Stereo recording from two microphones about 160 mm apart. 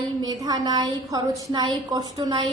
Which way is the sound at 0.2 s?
25° right (ahead or behind).